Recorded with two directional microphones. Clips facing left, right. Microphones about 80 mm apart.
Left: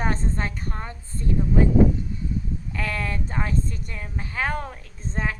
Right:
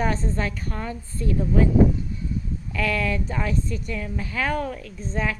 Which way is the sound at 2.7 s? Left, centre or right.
Left.